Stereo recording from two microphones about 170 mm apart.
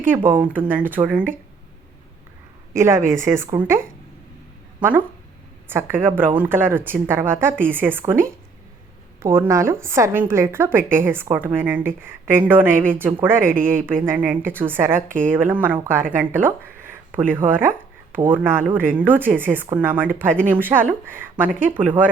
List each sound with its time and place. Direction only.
0.0 s a woman's voice: 10° right (ahead or behind)
2.7 s a woman's voice: 15° right (ahead or behind)
13.4 s speech: 55° right (ahead or behind)
13.7 s a woman's voice: 15° right (ahead or behind)